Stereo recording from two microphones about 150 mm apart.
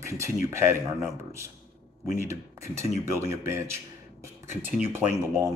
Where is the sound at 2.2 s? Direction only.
20° right (ahead or behind).